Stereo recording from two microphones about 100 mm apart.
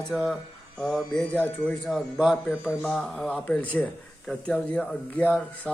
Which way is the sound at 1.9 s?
5° right (ahead or behind).